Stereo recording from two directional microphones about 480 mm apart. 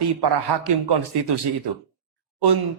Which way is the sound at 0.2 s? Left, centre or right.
Right.